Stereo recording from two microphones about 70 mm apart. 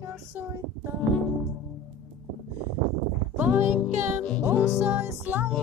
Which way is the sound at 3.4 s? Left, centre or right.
Right.